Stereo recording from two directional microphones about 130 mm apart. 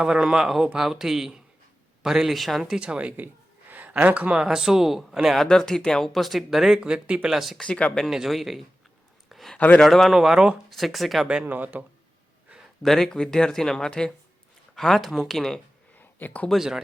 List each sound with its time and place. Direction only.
0.0 s a man's voice: 5° right (ahead or behind)
9.3 s a sound: centre (ahead or behind)
9.6 s a man's voice: 10° left (ahead or behind); by 11.9 s 15° right (ahead or behind)
12.8 s a man's voice: 5° left (ahead or behind)
16.0 s a sound: 15° left (ahead or behind)
16.5 s a man's voice: 5° right (ahead or behind)